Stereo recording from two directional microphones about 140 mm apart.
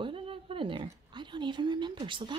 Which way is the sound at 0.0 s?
40° right (ahead or behind).